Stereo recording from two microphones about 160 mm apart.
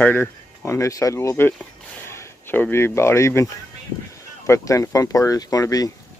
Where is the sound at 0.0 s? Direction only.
10° left (ahead or behind).